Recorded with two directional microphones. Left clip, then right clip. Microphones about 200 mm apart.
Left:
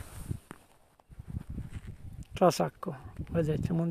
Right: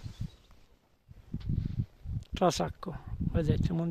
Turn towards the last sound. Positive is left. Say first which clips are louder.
# left 2 dB
turn(degrees=-5)  # may be behind; listen again after turning